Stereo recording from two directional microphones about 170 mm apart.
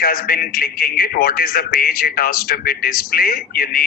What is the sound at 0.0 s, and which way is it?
A man's voice, 60° left (ahead or behind).